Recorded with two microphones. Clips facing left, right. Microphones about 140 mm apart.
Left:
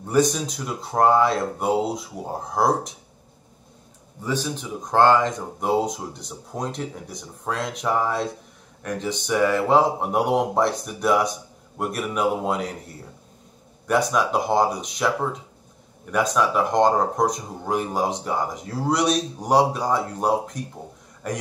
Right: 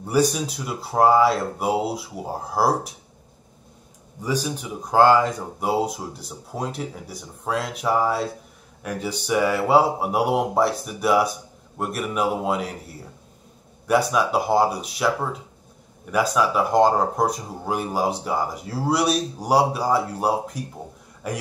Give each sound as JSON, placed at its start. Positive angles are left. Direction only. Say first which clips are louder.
{"t": 0.0, "sound": "speech", "louder": "even", "side_deg": -5}
{"t": 4.2, "sound": "a man's voice", "louder": "right 1 dB", "side_deg": -10}